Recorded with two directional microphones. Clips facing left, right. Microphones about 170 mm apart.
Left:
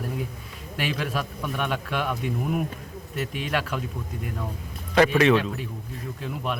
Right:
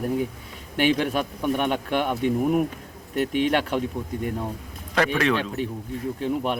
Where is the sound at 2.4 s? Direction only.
45° right (ahead or behind).